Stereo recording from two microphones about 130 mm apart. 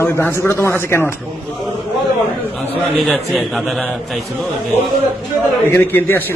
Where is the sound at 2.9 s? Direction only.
Centre (ahead or behind).